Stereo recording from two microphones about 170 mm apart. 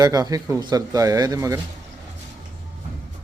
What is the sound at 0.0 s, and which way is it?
Speech, 20° right (ahead or behind).